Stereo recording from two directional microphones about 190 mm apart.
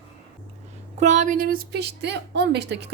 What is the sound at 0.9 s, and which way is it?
A woman's voice, 40° right (ahead or behind).